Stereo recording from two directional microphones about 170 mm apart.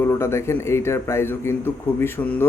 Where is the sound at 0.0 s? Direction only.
15° left (ahead or behind).